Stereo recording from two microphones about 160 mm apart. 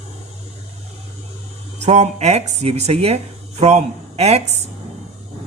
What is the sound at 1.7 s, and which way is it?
Speech, 45° right (ahead or behind).